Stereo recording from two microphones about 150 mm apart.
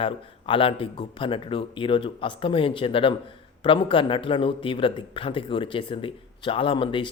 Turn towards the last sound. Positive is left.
turn(degrees=35)  # may be behind; listen again after turning